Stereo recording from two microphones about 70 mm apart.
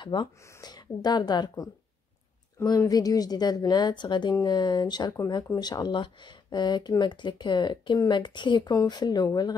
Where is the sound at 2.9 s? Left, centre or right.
Left.